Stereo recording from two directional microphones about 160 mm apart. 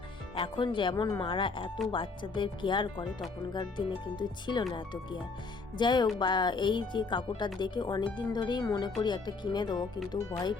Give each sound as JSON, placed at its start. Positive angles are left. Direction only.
{"t": 0.3, "sound": "speech", "side_deg": 30}
{"t": 5.7, "sound": "speech", "side_deg": 30}